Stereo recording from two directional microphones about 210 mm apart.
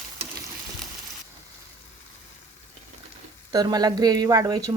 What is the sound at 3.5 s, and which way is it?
Speech, 20° right (ahead or behind).